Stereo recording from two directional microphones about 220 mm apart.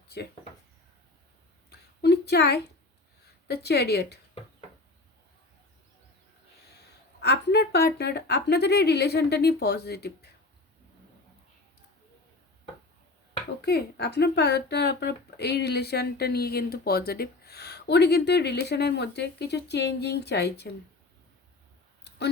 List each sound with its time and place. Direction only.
2.0 s a sound: 50° left (ahead or behind)
3.4 s speech: 50° left (ahead or behind)
7.2 s speech: 50° left (ahead or behind)
13.6 s speech: 45° left (ahead or behind)